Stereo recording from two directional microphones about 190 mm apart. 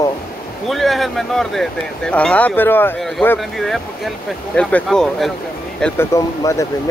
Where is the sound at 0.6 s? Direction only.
Centre (ahead or behind).